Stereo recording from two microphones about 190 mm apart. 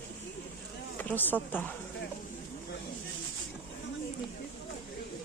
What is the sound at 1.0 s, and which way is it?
Speech, 10° left (ahead or behind).